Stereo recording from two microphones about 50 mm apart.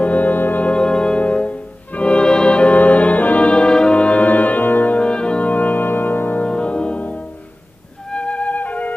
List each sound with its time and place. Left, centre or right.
0.0 s music: left
0.7 s music: centre; by 4.9 s left
4.9 s brass instrument: left
6.4 s music: left
8.1 s flute: left